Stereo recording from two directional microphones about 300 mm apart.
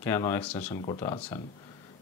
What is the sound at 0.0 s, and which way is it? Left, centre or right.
Speech, centre.